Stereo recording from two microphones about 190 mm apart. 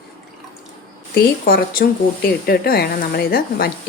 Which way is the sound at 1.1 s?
55° left (ahead or behind).